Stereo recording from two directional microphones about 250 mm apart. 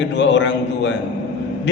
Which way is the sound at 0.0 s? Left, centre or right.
Left.